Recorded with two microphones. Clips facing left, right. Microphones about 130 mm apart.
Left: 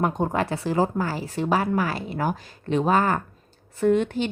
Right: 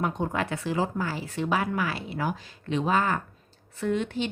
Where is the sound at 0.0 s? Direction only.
40° left (ahead or behind).